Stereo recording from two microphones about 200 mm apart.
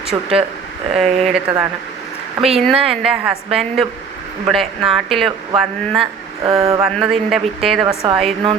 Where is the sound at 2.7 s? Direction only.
30° right (ahead or behind).